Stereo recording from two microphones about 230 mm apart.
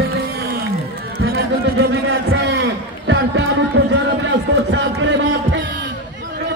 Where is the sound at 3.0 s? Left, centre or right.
Right.